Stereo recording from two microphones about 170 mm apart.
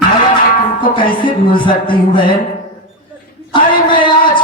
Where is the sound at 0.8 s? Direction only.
30° left (ahead or behind).